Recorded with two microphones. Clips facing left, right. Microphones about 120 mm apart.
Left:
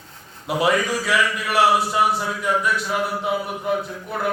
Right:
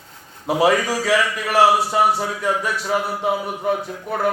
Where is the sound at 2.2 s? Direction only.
70° right (ahead or behind).